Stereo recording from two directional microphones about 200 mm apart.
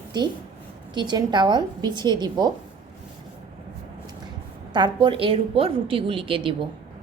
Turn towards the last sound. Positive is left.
turn(degrees=-25)  # may be behind; listen again after turning